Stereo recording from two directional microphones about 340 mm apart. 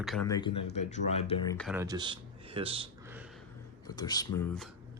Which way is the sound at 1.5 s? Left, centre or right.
Centre.